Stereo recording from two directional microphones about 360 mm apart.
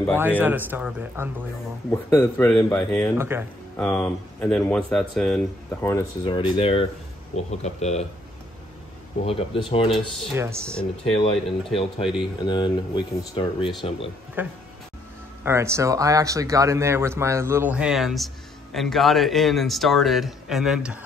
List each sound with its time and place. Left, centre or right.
0.4 s speech: centre
1.9 s speech: centre
9.2 s speech: centre
9.8 s speech: centre
11.1 s speech: centre
12.0 s speech: centre
12.4 s speech: centre
14.4 s speech: centre